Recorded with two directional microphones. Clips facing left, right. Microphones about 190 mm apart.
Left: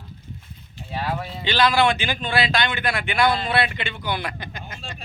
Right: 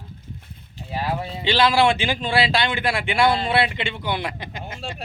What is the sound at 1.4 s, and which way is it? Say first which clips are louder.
Speech: right 1 dB; 25° right (ahead or behind).